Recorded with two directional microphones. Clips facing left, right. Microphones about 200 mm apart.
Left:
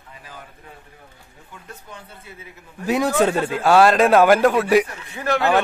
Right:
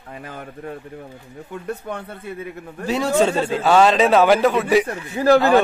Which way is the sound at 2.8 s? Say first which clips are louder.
Even; 15° left (ahead or behind).